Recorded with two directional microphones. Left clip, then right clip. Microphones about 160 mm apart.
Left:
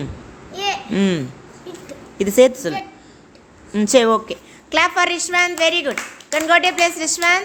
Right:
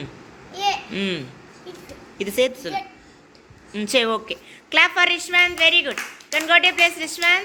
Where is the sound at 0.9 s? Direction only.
35° left (ahead or behind).